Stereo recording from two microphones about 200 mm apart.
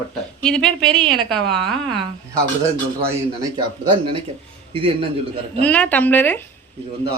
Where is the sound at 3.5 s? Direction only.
25° right (ahead or behind).